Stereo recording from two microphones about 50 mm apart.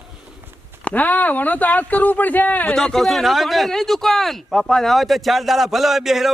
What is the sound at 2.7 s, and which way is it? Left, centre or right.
A man's voice, centre.